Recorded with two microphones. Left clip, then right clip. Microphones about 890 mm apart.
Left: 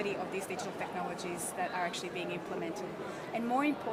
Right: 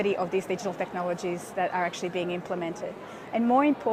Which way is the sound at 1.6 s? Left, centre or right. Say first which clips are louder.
Right 8 dB; right.